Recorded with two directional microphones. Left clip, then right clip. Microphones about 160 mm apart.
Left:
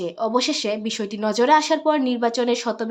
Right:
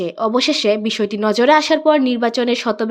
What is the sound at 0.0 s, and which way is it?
Speech, 25° right (ahead or behind).